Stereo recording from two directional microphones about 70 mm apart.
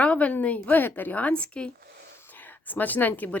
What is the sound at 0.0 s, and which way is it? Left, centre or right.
Speech, centre.